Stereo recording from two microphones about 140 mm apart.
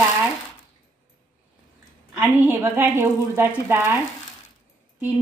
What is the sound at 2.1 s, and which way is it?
A woman's voice, 15° right (ahead or behind).